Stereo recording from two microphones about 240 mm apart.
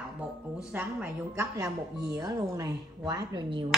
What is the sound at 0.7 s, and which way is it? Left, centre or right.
A woman's voice, centre.